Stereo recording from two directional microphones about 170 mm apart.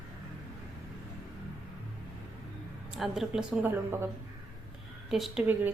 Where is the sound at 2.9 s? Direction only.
Centre (ahead or behind).